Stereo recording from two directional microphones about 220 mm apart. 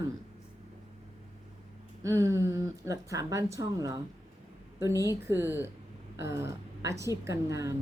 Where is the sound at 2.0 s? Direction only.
15° right (ahead or behind).